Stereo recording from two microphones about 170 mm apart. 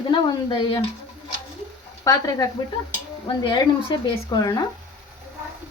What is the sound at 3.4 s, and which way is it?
A woman's voice, 25° left (ahead or behind).